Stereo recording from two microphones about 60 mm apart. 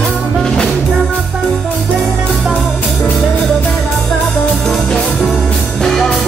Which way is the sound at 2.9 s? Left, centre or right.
Centre.